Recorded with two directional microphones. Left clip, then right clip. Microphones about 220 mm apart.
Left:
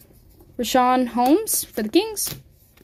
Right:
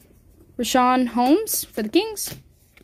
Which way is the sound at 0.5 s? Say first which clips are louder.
Even; 5° right (ahead or behind).